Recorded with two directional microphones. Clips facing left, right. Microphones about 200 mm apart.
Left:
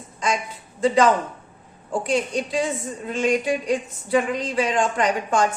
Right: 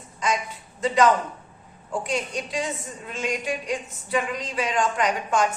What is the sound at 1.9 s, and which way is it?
A woman's voice, 30° left (ahead or behind).